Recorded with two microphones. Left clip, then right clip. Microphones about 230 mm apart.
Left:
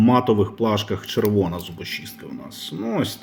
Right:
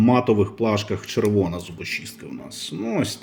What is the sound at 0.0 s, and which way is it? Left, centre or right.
Speech, centre.